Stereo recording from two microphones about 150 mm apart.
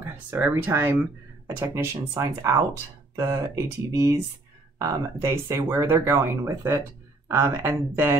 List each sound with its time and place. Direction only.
0.0 s speech: 15° right (ahead or behind)